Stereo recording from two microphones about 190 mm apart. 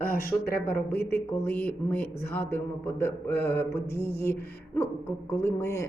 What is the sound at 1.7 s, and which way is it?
A woman's voice, 10° left (ahead or behind).